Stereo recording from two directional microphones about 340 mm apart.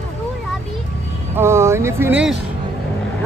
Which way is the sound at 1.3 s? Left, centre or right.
Centre.